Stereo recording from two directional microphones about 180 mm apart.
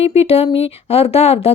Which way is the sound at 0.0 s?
35° left (ahead or behind).